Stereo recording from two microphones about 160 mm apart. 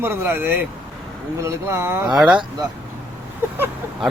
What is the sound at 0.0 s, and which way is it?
Speech, 15° right (ahead or behind).